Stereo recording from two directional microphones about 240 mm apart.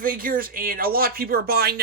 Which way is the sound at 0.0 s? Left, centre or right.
Right.